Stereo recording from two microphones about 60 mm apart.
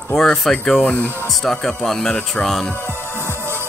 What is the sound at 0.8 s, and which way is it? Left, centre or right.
Speech, left.